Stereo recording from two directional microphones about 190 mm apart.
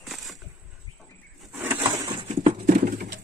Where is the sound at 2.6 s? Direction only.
50° right (ahead or behind).